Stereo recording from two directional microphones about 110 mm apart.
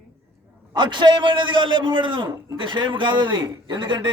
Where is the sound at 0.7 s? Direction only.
45° right (ahead or behind).